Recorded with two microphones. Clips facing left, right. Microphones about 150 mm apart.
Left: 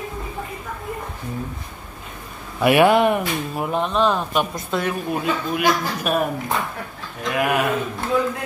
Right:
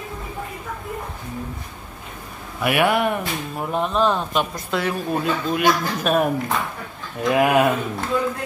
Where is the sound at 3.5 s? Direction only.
Centre (ahead or behind).